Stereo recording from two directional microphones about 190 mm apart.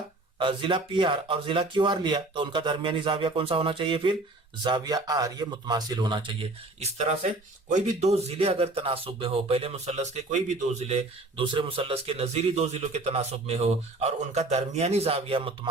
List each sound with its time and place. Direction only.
0.3 s speech: 25° right (ahead or behind)